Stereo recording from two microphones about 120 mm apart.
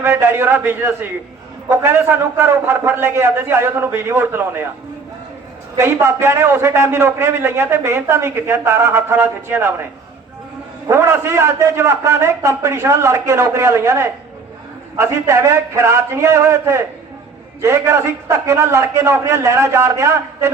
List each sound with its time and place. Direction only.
0.0 s a man's voice: 20° right (ahead or behind)
5.7 s a man's voice: 20° right (ahead or behind)
10.8 s a man's voice: 20° right (ahead or behind)